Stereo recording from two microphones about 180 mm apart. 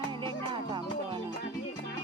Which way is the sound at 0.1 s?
25° right (ahead or behind).